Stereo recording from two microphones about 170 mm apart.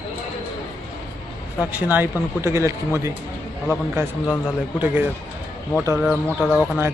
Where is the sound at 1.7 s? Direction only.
10° right (ahead or behind).